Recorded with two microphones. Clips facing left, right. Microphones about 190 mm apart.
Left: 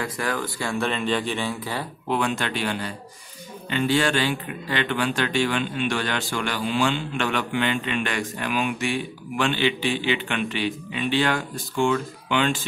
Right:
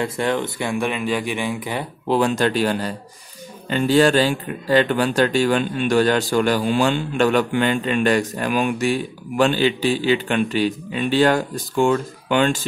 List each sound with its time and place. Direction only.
0.0 s speech: 25° right (ahead or behind)
2.0 s speech: 35° right (ahead or behind)